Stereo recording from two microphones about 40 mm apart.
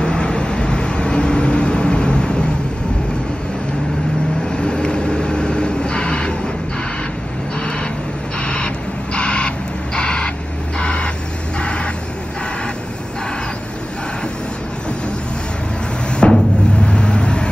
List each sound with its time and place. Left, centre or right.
0.0 s vehicle: left
4.5 s vehicle: left
8.4 s a sound: left
10.8 s vehicle: left
16.1 s a sound: left
16.8 s vehicle: left